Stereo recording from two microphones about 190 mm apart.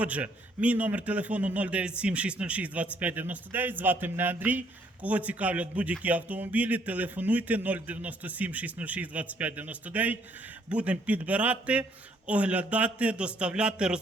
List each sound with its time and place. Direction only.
0.0 s a man's voice: 5° right (ahead or behind)